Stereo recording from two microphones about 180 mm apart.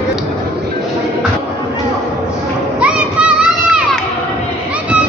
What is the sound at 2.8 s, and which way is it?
Children playing, 5° right (ahead or behind).